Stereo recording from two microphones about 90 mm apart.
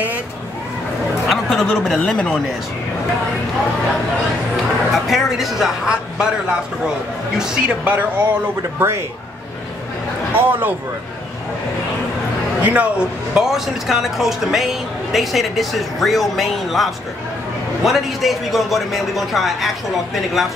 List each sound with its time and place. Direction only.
1.3 s speech: centre (ahead or behind)
4.9 s speech: centre (ahead or behind); by 8.8 s 20° right (ahead or behind)
10.3 s a man's voice: 20° right (ahead or behind)
12.6 s speech: 15° right (ahead or behind)